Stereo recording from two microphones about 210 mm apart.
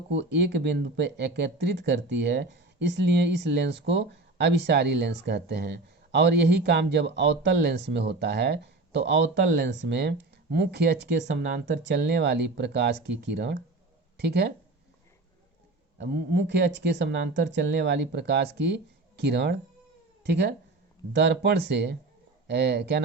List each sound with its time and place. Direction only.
0.1 s speech: 55° right (ahead or behind)
16.0 s speech: 55° right (ahead or behind)
21.1 s speech: 55° right (ahead or behind)